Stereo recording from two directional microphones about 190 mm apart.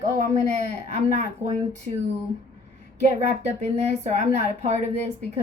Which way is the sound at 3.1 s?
35° right (ahead or behind).